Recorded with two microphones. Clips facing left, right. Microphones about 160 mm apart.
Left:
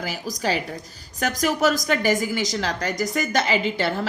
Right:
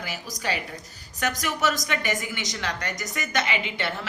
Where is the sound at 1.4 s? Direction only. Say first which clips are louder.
Left 8 dB; 35° left (ahead or behind).